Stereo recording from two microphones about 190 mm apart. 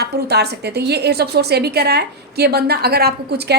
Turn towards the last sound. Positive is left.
turn(degrees=-60)  # may be behind; listen again after turning